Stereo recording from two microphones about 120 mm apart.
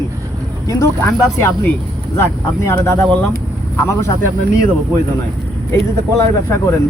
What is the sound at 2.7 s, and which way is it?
Speech, 20° left (ahead or behind).